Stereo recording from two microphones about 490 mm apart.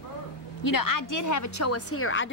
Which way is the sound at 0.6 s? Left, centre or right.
Left.